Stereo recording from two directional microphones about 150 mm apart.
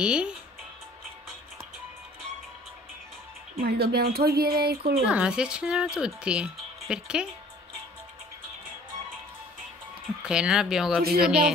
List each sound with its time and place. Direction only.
0.0 s speech: 5° right (ahead or behind)
3.5 s speech: 90° right
5.0 s speech: 5° right (ahead or behind)
10.2 s speech: 5° right (ahead or behind)
11.0 s speech: 90° right
11.2 s speech: 5° right (ahead or behind)